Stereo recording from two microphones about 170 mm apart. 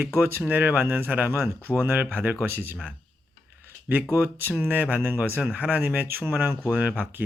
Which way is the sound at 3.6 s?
10° right (ahead or behind).